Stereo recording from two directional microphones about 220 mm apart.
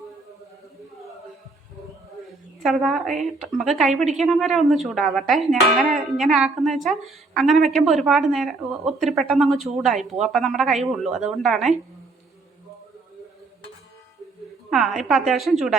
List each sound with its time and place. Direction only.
2.6 s speech: centre (ahead or behind)
3.9 s a woman's voice: 30° right (ahead or behind)
4.2 s speech: centre (ahead or behind)
14.7 s speech: centre (ahead or behind)